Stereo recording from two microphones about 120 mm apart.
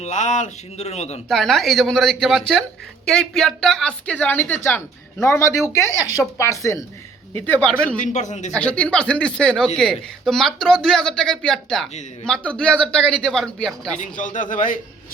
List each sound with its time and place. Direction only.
0.0 s speech: 75° left (ahead or behind)
1.3 s a woman's voice: centre (ahead or behind)
8.0 s speech: 85° left
8.5 s a man's voice: 10° left (ahead or behind)
14.0 s a man's voice: 90° left